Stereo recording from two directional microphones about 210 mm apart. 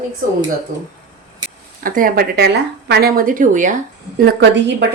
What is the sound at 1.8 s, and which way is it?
Speech, 40° right (ahead or behind).